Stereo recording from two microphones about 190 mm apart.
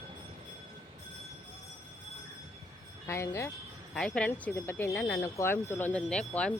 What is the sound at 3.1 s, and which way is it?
Speech, 15° left (ahead or behind).